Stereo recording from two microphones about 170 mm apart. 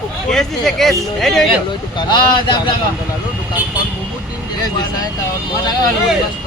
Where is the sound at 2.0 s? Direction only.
25° left (ahead or behind).